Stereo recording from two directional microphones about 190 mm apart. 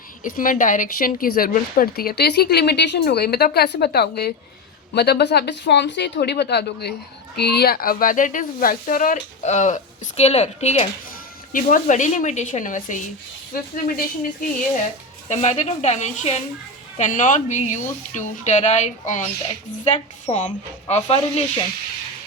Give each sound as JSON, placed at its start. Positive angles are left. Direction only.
{"t": 0.2, "sound": "a woman's voice", "side_deg": 45}
{"t": 15.3, "sound": "a woman's voice", "side_deg": 35}
{"t": 19.8, "sound": "a woman's voice", "side_deg": 25}
{"t": 20.3, "sound": "a woman's voice", "side_deg": 35}